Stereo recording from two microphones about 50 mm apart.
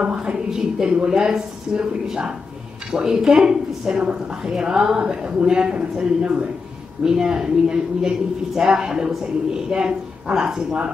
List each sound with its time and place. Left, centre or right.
0.0 s a woman's voice: centre